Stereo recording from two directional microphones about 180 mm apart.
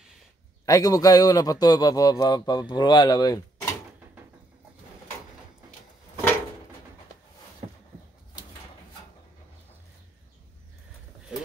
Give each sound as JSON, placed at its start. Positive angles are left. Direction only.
{"t": 0.7, "sound": "speech", "side_deg": 20}